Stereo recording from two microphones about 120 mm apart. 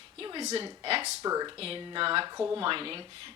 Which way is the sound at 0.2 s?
40° right (ahead or behind).